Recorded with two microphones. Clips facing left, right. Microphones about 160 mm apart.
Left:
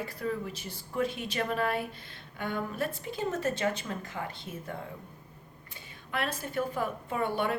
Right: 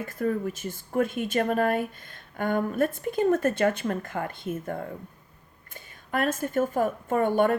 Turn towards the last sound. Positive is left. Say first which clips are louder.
# right 8 dB
turn(degrees=-45)  # may be behind; listen again after turning